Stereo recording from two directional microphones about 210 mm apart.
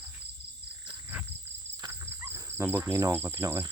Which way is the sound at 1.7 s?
15° right (ahead or behind).